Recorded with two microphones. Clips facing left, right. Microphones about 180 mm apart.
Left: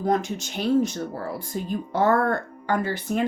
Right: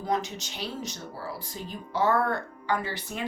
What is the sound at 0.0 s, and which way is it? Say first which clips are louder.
Speech: left 6 dB; 50° left (ahead or behind).